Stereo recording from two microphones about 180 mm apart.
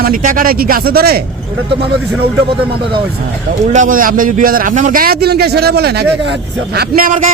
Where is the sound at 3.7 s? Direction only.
50° right (ahead or behind).